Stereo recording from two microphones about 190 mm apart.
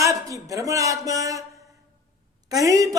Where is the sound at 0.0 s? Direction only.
15° right (ahead or behind).